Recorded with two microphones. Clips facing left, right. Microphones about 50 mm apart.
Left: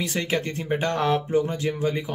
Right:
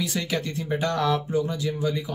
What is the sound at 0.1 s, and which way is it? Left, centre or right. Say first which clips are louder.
A man's voice: left 2 dB; left.